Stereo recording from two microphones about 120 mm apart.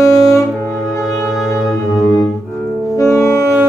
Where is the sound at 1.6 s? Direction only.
30° left (ahead or behind).